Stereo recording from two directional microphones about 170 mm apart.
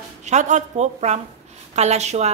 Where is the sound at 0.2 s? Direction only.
45° right (ahead or behind).